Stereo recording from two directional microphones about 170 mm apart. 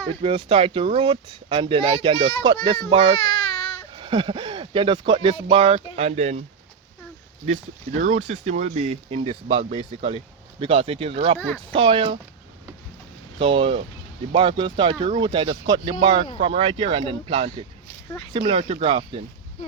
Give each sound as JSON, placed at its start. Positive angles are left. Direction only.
{"t": 0.2, "sound": "speech", "side_deg": -30}
{"t": 7.4, "sound": "speech", "side_deg": -45}
{"t": 11.3, "sound": "speech", "side_deg": 10}
{"t": 11.7, "sound": "speech", "side_deg": -30}
{"t": 13.4, "sound": "speech", "side_deg": -30}